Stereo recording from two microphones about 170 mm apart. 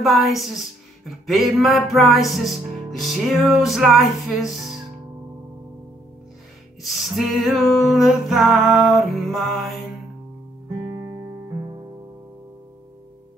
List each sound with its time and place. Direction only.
0.0 s music: centre (ahead or behind)
6.8 s music: centre (ahead or behind)
10.9 s music: 15° right (ahead or behind)